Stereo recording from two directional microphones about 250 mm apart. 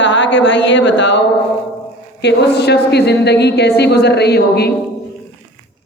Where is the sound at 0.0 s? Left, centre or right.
Left.